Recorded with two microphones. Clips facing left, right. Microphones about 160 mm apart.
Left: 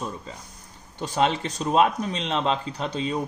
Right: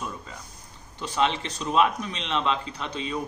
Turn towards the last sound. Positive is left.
turn(degrees=40)  # may be behind; listen again after turning